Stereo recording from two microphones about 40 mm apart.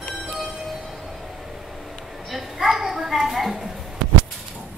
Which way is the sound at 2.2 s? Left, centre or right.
Centre.